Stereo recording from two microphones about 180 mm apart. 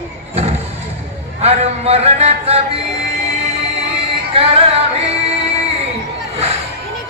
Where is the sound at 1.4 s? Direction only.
35° right (ahead or behind).